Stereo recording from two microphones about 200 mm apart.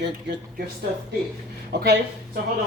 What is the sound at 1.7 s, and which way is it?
Speech, 55° right (ahead or behind).